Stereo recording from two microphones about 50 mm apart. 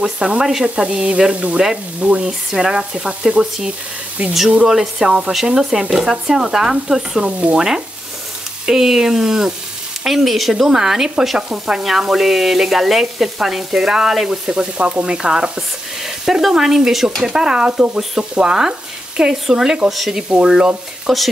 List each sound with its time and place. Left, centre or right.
0.5 s sizzle: centre
0.8 s sizzle: right
2.2 s sizzle: centre
7.2 s sizzle: right
7.5 s sizzle: centre
19.9 s speech: centre
20.2 s sizzle: right
21.1 s speech: centre